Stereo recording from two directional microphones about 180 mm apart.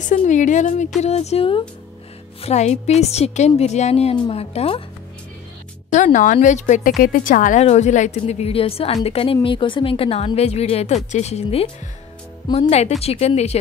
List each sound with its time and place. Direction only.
0.0 s a woman's voice: 45° left (ahead or behind)
5.9 s a woman's voice: 40° left (ahead or behind)